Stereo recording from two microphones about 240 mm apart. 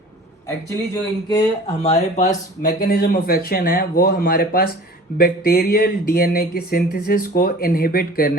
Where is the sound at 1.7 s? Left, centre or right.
Left.